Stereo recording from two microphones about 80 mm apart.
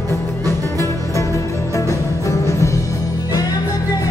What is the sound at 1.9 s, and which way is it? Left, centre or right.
Music, left.